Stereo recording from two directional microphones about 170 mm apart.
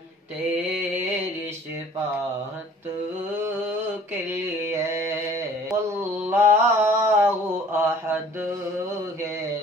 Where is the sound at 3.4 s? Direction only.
15° right (ahead or behind).